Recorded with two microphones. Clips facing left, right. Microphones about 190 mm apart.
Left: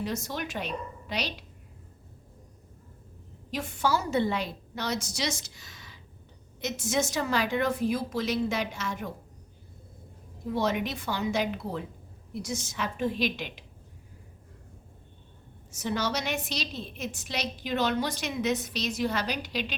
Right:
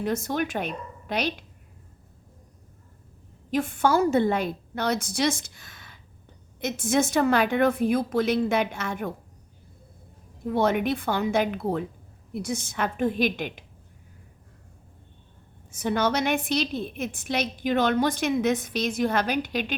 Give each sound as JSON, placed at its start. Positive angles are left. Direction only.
{"t": 0.0, "sound": "a woman's voice", "side_deg": -55}
{"t": 3.5, "sound": "a woman's voice", "side_deg": -55}
{"t": 10.5, "sound": "a woman's voice", "side_deg": -55}
{"t": 15.7, "sound": "a woman's voice", "side_deg": -55}